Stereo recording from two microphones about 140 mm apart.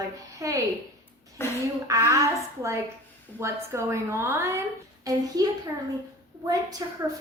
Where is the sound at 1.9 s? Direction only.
20° right (ahead or behind).